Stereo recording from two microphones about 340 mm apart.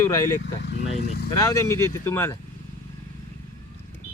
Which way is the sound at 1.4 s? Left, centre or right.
Centre.